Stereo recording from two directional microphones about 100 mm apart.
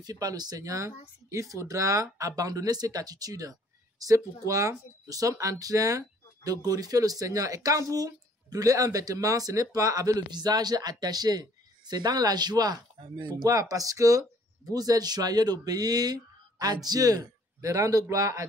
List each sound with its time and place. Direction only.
0.0 s speech: 35° right (ahead or behind)